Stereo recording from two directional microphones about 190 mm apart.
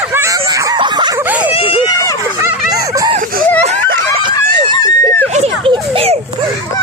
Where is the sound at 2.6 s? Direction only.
20° right (ahead or behind).